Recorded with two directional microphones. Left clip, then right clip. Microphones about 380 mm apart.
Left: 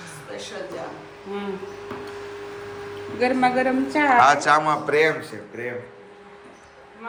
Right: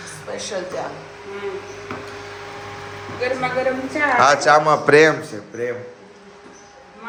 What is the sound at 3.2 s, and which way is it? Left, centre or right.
Speech, left.